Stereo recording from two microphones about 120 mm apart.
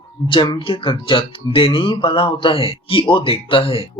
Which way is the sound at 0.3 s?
45° left (ahead or behind).